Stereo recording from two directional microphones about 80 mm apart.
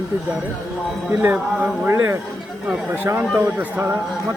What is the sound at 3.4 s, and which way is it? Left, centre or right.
Speech, right.